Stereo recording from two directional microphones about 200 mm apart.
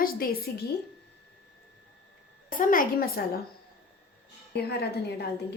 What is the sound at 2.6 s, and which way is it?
Speech, 45° left (ahead or behind).